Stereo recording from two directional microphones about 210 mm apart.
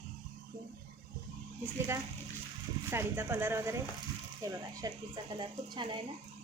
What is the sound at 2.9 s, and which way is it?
Speech, 10° right (ahead or behind).